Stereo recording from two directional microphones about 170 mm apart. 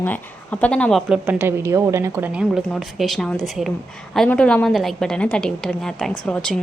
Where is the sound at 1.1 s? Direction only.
10° right (ahead or behind).